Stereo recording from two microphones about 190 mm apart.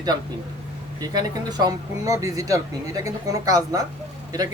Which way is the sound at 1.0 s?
20° right (ahead or behind).